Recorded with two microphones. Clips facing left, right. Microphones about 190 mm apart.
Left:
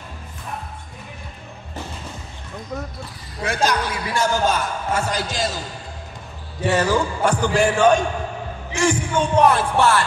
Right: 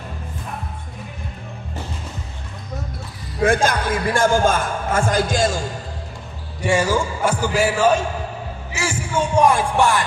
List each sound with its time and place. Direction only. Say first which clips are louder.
3.4 s a man's voice: right 4 dB; 50° right (ahead or behind)
6.6 s a man's voice: even; 10° right (ahead or behind)